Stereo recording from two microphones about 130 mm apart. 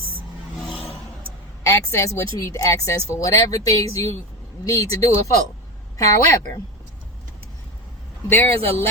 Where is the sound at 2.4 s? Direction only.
25° left (ahead or behind).